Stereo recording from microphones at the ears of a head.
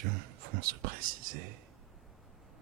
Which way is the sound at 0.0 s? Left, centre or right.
Right.